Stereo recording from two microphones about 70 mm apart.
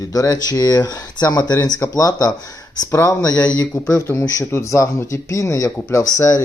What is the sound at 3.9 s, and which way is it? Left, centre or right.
Speech, left.